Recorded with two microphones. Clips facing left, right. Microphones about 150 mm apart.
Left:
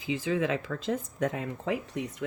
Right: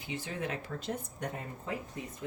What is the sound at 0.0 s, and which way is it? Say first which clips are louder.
Speech: left 9 dB; 90° left.